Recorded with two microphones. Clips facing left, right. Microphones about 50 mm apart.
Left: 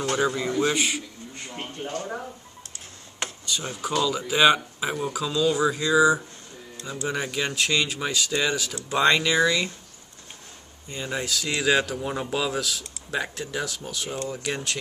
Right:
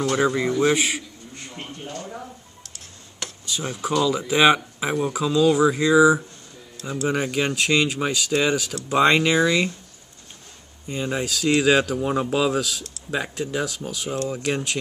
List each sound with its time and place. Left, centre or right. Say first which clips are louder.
0.1 s speech: right 1 dB; right
1.6 s speech: left 3 dB; left
3.4 s speech: right 4 dB; centre
10.9 s speech: right 4 dB; centre
12.3 s speech: right 4 dB; right
12.5 s speech: right 3 dB; centre